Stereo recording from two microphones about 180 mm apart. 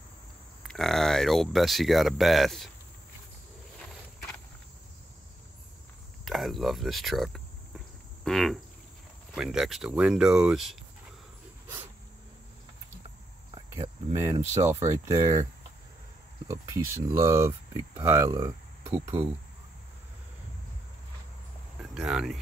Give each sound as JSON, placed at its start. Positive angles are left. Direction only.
{"t": 0.7, "sound": "speech", "side_deg": 0}
{"t": 6.2, "sound": "speech", "side_deg": 0}
{"t": 8.2, "sound": "frog", "side_deg": 0}
{"t": 9.3, "sound": "speech", "side_deg": 0}
{"t": 14.1, "sound": "speech", "side_deg": -15}
{"t": 16.4, "sound": "speech", "side_deg": -20}
{"t": 21.9, "sound": "speech", "side_deg": -5}